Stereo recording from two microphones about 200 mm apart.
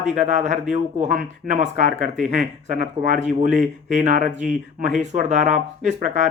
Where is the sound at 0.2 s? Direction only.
35° right (ahead or behind).